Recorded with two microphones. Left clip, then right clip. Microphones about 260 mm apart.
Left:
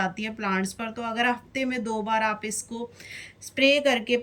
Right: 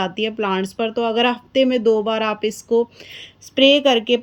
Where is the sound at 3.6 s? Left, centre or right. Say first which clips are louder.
Right 7 dB; right.